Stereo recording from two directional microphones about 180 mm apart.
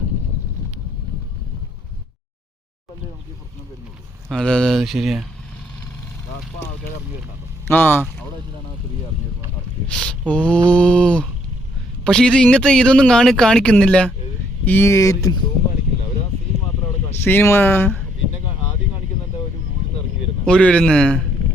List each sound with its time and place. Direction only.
4.3 s speech: 5° left (ahead or behind)
7.7 s speech: 10° left (ahead or behind)
9.9 s speech: 5° left (ahead or behind)
17.2 s speech: 10° left (ahead or behind)
20.4 s speech: 5° left (ahead or behind)